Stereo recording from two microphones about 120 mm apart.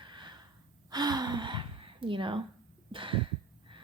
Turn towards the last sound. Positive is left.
turn(degrees=-45)  # may be behind; listen again after turning